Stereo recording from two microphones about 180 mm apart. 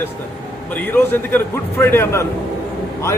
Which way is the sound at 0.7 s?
10° left (ahead or behind).